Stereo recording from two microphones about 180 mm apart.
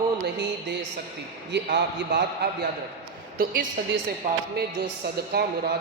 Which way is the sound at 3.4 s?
55° right (ahead or behind).